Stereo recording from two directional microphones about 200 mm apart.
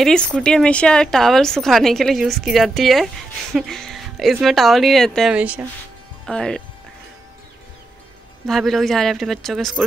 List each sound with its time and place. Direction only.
0.0 s a woman's voice: 5° left (ahead or behind)
6.2 s a woman's voice: 5° left (ahead or behind)
8.5 s a woman's voice: centre (ahead or behind)